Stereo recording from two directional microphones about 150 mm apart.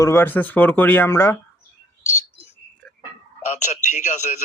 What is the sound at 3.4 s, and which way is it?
A man's voice, 55° left (ahead or behind).